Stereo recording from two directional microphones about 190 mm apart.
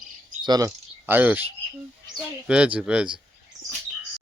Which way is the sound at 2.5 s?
5° right (ahead or behind).